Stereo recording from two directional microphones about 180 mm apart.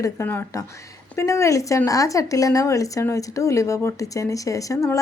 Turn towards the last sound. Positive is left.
turn(degrees=15)  # may be behind; listen again after turning